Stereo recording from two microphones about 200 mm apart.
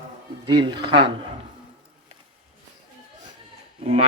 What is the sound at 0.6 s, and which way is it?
Speech, 25° right (ahead or behind).